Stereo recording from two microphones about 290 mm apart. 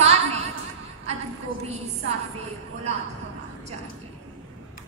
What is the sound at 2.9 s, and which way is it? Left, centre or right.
Yodeling, right.